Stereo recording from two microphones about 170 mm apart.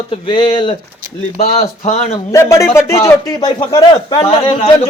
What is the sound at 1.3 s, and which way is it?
Speech, 45° left (ahead or behind).